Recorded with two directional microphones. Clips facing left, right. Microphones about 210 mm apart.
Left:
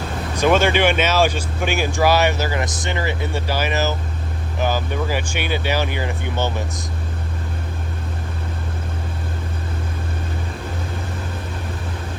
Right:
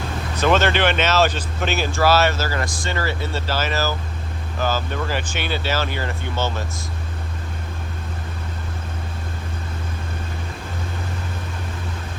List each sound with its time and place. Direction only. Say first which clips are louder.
0.3 s speech: left 2 dB; 10° left (ahead or behind)